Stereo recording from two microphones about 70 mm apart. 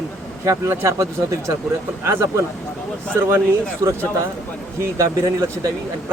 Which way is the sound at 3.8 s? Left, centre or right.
Right.